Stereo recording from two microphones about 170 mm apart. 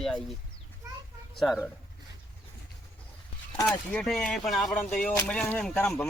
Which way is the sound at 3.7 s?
Centre (ahead or behind).